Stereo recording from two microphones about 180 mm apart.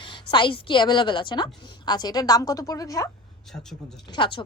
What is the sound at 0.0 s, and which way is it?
A woman's voice, 25° left (ahead or behind).